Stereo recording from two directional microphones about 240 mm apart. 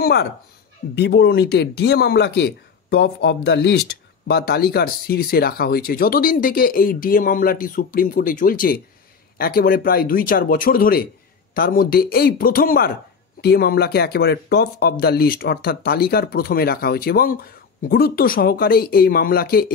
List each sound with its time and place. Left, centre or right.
0.0 s speech: left